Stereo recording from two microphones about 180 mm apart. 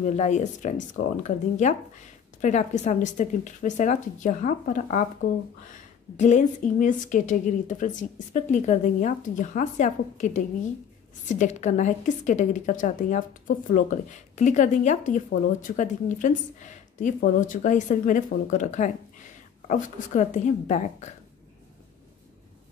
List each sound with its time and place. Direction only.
0.0 s a woman's voice: 40° left (ahead or behind)
6.1 s a woman's voice: 40° left (ahead or behind)